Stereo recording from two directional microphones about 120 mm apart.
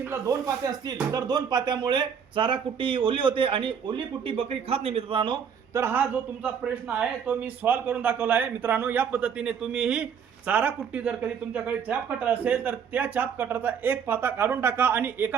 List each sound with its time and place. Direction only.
0.0 s speech: 20° right (ahead or behind)
0.4 s speech: 30° right (ahead or behind)
5.7 s a man's voice: 20° right (ahead or behind)